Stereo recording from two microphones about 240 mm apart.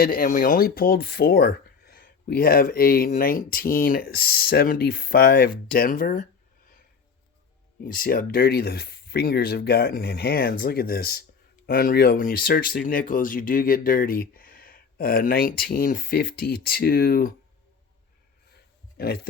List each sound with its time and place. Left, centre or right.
0.0 s speech: left
7.9 s speech: left
18.9 s speech: left